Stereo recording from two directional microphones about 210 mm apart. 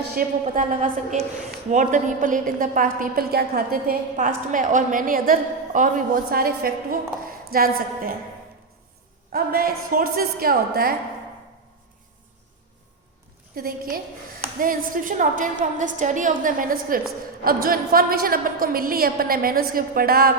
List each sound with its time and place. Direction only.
0.2 s a woman's voice: 40° right (ahead or behind)
9.3 s a woman's voice: 45° right (ahead or behind)
13.6 s a woman's voice: 45° right (ahead or behind)